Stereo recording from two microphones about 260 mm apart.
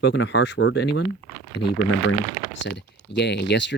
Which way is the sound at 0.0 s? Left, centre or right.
Left.